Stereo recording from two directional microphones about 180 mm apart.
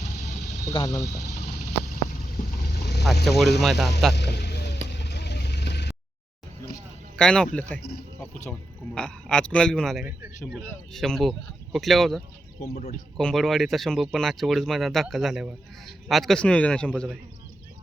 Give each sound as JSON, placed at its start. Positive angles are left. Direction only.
{"t": 0.7, "sound": "speech", "side_deg": 25}
{"t": 2.6, "sound": "vehicle", "side_deg": 65}
{"t": 3.2, "sound": "speech", "side_deg": 0}
{"t": 4.1, "sound": "vehicle", "side_deg": 70}
{"t": 7.2, "sound": "speech", "side_deg": 5}
{"t": 7.8, "sound": "speech", "side_deg": 65}
{"t": 9.0, "sound": "speech", "side_deg": 5}
{"t": 10.4, "sound": "speech", "side_deg": 5}